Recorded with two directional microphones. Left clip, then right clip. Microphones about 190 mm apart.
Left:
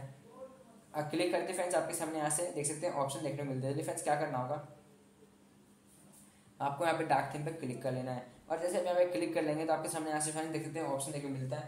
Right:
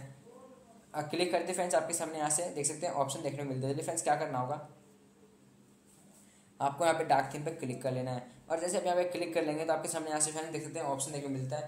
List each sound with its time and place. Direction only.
0.9 s speech: 25° right (ahead or behind)
6.6 s speech: 25° right (ahead or behind)